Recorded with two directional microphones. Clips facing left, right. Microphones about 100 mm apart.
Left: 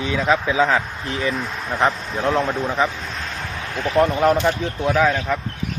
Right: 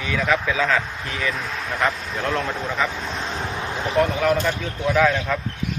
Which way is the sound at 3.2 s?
25° right (ahead or behind).